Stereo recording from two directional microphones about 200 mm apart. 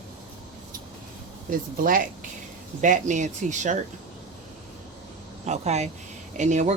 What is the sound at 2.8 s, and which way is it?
Speech, 40° right (ahead or behind).